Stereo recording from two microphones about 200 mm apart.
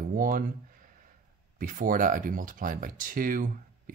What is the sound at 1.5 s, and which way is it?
Speech, 45° right (ahead or behind).